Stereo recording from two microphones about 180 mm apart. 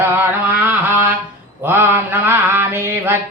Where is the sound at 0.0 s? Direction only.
10° right (ahead or behind).